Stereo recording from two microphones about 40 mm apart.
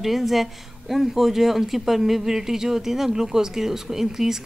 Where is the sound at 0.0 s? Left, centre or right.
Centre.